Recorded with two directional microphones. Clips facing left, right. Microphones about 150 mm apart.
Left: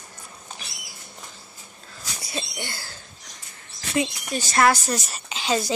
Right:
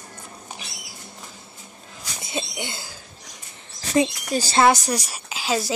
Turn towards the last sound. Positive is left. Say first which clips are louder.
# even
turn(degrees=-5)  # may be behind; listen again after turning